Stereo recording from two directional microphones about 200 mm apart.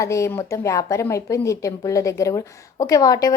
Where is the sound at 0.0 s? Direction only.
15° left (ahead or behind).